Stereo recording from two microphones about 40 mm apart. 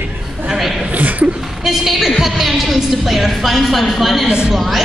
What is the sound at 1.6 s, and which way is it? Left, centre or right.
A woman's voice, centre.